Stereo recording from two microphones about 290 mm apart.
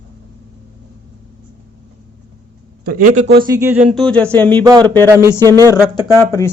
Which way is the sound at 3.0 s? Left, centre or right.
Right.